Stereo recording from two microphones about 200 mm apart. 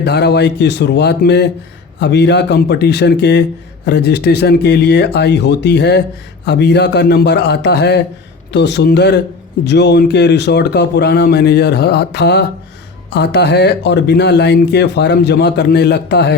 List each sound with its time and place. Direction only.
0.0 s speech: 55° left (ahead or behind)